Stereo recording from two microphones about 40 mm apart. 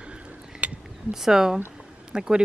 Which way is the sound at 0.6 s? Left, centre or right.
Right.